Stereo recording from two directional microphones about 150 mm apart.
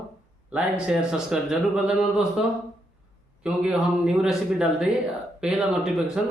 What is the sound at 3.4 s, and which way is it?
A man's voice, 5° right (ahead or behind).